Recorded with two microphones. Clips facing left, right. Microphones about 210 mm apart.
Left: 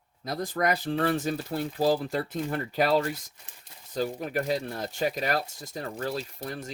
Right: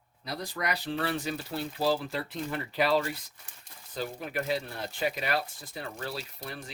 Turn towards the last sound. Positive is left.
turn(degrees=45)  # may be behind; listen again after turning